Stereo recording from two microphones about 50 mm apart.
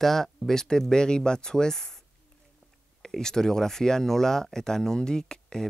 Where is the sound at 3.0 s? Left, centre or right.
Centre.